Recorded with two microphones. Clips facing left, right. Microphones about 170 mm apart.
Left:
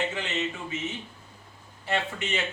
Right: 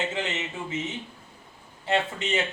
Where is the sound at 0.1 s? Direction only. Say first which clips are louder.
Even; 20° right (ahead or behind).